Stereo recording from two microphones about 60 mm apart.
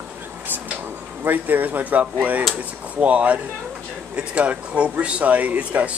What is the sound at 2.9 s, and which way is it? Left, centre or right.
Speech, right.